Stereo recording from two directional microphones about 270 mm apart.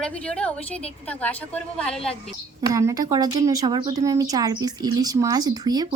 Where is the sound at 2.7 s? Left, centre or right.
Centre.